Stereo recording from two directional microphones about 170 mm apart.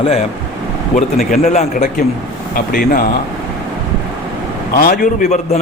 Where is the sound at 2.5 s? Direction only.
55° left (ahead or behind).